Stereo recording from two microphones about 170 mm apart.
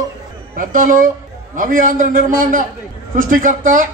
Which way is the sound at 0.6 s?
55° right (ahead or behind).